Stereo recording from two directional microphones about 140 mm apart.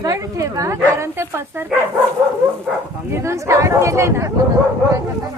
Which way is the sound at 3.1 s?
20° right (ahead or behind).